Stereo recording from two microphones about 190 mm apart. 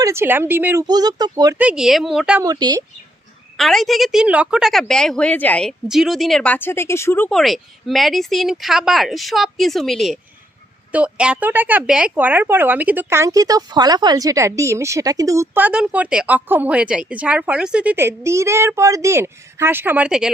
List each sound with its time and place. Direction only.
0.0 s speech: 15° right (ahead or behind)
1.5 s a woman's voice: 5° right (ahead or behind)
2.4 s speech: 20° right (ahead or behind)
3.6 s a woman's voice: centre (ahead or behind)